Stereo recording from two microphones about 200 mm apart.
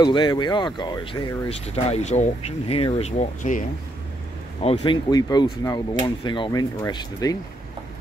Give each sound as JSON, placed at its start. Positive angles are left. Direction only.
{"t": 0.0, "sound": "speech", "side_deg": 20}
{"t": 4.6, "sound": "speech", "side_deg": 20}